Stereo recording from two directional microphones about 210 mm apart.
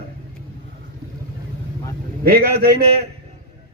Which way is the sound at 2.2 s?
50° right (ahead or behind).